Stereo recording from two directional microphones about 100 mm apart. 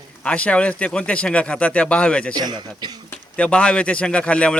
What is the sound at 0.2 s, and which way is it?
Speech, 10° left (ahead or behind).